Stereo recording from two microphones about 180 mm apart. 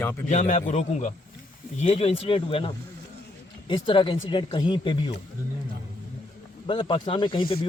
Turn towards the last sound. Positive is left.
turn(degrees=25)  # may be behind; listen again after turning